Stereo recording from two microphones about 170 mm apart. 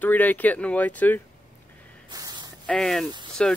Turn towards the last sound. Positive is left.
turn(degrees=5)  # may be behind; listen again after turning